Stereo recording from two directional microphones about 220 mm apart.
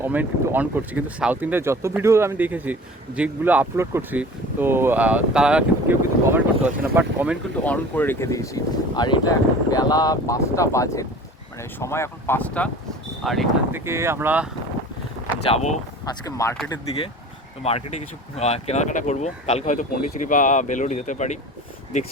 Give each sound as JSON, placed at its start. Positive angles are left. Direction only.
{"t": 0.0, "sound": "speech", "side_deg": -10}
{"t": 7.6, "sound": "speech", "side_deg": 5}
{"t": 13.7, "sound": "speech", "side_deg": -10}
{"t": 15.4, "sound": "speech", "side_deg": 30}
{"t": 16.0, "sound": "speech", "side_deg": 15}
{"t": 18.3, "sound": "speech", "side_deg": 30}